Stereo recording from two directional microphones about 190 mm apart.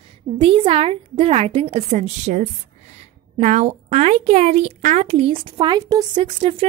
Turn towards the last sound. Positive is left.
turn(degrees=-30)  # may be behind; listen again after turning